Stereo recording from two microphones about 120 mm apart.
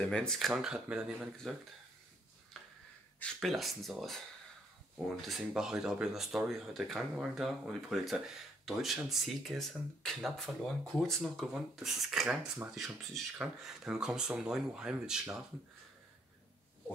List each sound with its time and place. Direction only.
0.0 s speech: 5° left (ahead or behind)
3.3 s speech: centre (ahead or behind)